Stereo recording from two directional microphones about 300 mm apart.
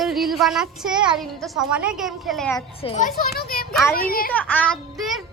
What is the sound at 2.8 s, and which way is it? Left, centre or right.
Speech, left.